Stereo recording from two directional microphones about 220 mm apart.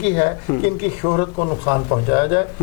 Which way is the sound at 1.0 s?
25° left (ahead or behind).